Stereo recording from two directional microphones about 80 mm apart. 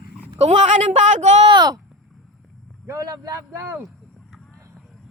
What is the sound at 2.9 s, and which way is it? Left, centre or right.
Speech, right.